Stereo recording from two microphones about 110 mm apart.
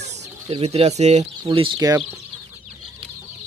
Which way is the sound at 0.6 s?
70° right (ahead or behind).